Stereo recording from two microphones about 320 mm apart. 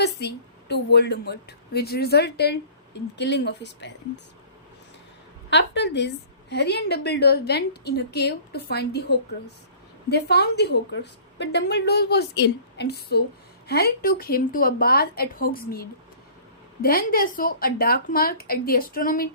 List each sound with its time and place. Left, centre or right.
0.0 s a woman's voice: left
5.5 s a woman's voice: left